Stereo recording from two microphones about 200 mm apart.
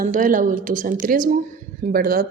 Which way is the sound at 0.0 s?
40° right (ahead or behind).